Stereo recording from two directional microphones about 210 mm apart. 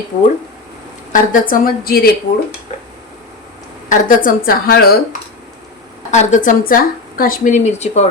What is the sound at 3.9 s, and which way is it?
A woman's voice, 40° left (ahead or behind).